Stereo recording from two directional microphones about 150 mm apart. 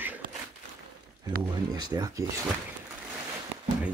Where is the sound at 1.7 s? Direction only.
25° right (ahead or behind).